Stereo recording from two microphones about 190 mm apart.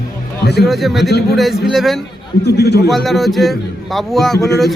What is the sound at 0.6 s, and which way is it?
Speech, centre (ahead or behind).